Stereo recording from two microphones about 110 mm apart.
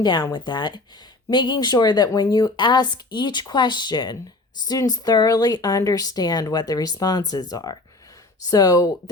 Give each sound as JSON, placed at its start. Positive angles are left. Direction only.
{"t": 0.0, "sound": "speech", "side_deg": 40}